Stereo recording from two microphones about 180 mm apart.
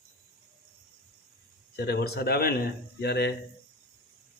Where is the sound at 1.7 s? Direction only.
60° left (ahead or behind).